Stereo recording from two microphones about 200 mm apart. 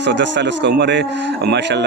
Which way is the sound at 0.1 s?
60° right (ahead or behind).